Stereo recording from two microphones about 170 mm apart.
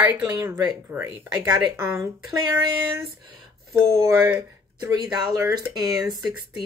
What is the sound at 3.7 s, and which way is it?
Speech, 20° right (ahead or behind).